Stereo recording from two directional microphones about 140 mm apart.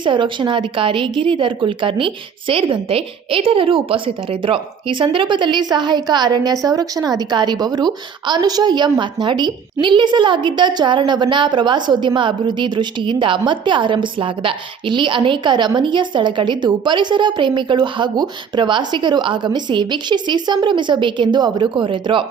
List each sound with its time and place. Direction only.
0.0 s a woman's voice: 35° right (ahead or behind)